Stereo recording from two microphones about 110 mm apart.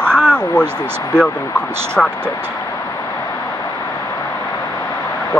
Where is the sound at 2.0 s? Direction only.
10° left (ahead or behind).